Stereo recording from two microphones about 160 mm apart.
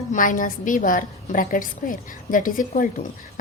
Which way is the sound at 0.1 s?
55° left (ahead or behind).